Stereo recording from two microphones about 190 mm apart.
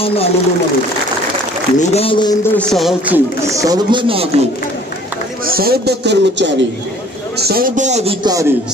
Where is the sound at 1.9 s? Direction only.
30° left (ahead or behind).